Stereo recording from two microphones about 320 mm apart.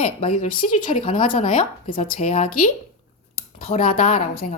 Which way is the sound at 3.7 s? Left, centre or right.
Centre.